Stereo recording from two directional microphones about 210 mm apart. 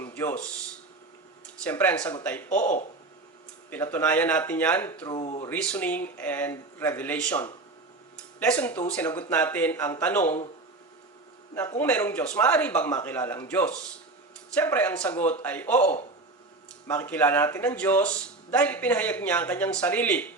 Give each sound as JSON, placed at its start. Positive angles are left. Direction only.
{"t": 0.0, "sound": "a man's voice", "side_deg": 10}
{"t": 3.9, "sound": "a man's voice", "side_deg": 10}
{"t": 5.1, "sound": "speech", "side_deg": 30}
{"t": 5.5, "sound": "a man's voice", "side_deg": 5}
{"t": 11.5, "sound": "a man's voice", "side_deg": 10}